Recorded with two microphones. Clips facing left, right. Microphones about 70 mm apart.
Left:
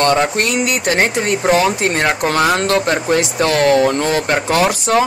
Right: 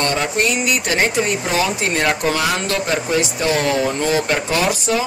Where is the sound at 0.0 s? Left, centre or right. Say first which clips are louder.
Left 4 dB; left.